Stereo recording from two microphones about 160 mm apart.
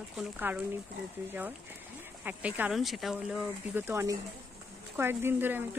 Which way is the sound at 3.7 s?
15° right (ahead or behind).